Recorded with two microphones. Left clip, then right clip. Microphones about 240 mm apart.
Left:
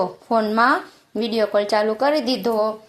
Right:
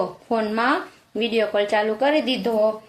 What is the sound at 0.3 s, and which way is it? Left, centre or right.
A woman's voice, left.